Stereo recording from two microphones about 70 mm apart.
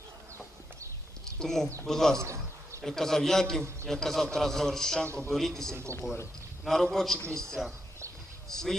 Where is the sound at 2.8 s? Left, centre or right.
Centre.